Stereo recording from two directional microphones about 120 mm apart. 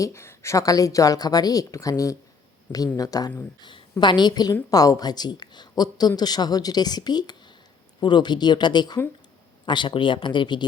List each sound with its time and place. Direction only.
0.0 s a man's voice: 25° left (ahead or behind)
3.6 s a woman's voice: 40° left (ahead or behind)